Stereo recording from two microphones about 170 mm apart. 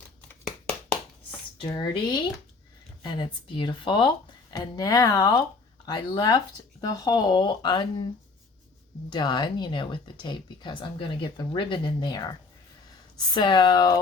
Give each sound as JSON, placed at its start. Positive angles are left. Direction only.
{"t": 1.6, "sound": "speech", "side_deg": 25}
{"t": 9.0, "sound": "speech", "side_deg": 25}
{"t": 13.3, "sound": "speech", "side_deg": 25}